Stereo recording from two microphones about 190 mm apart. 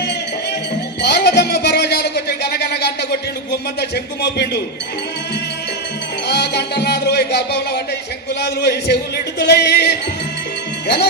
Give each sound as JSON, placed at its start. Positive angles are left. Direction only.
{"t": 1.0, "sound": "a sound", "side_deg": 60}
{"t": 6.2, "sound": "music", "side_deg": 60}
{"t": 8.4, "sound": "speech", "side_deg": 60}